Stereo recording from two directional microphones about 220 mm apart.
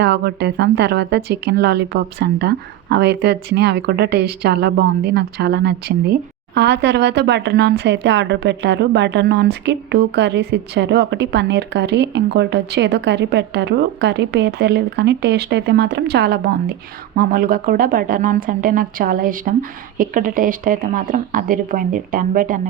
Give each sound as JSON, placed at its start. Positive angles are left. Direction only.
{"t": 0.0, "sound": "a woman's voice", "side_deg": -50}